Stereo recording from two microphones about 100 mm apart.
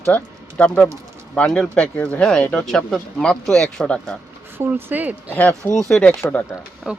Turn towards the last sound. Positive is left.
turn(degrees=-10)  # may be behind; listen again after turning